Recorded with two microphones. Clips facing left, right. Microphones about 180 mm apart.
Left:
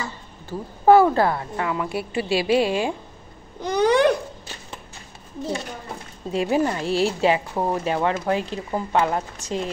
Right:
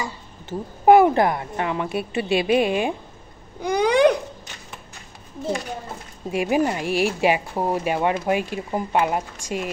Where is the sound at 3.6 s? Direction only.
10° right (ahead or behind).